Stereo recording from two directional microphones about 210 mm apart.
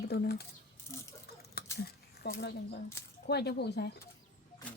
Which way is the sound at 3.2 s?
50° left (ahead or behind).